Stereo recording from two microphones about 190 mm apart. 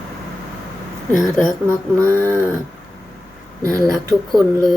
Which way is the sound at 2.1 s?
10° left (ahead or behind).